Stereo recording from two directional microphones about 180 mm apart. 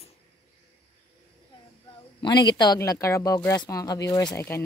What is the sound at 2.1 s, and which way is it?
Speech, 25° left (ahead or behind).